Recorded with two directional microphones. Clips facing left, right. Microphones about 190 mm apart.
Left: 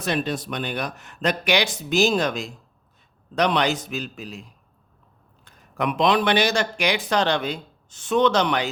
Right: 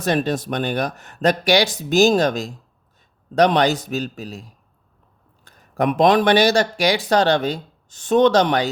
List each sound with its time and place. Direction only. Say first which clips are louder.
0.0 s speech: right 5 dB; 45° right (ahead or behind)
5.7 s speech: right 5 dB; 45° right (ahead or behind)